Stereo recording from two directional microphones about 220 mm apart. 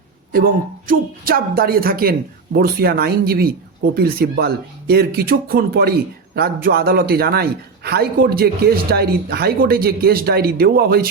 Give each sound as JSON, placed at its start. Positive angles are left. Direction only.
{"t": 0.3, "sound": "a man's voice", "side_deg": -40}